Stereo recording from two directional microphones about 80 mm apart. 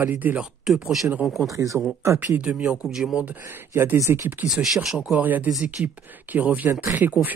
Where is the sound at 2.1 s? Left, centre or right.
Centre.